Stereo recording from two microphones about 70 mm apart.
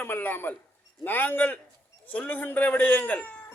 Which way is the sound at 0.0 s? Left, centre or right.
Left.